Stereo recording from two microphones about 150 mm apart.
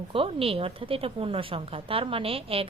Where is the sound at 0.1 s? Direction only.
40° right (ahead or behind).